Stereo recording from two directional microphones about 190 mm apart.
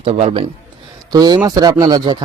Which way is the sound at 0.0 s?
30° right (ahead or behind).